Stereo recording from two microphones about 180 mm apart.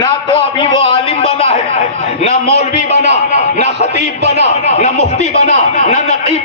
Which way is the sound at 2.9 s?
70° right (ahead or behind).